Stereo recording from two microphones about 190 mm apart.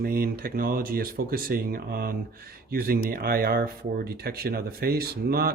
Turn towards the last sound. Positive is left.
turn(degrees=-55)  # may be behind; listen again after turning